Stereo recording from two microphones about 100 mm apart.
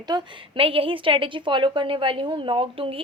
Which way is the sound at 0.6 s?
65° right (ahead or behind).